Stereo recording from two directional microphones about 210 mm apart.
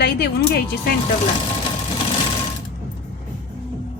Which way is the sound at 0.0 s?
50° left (ahead or behind).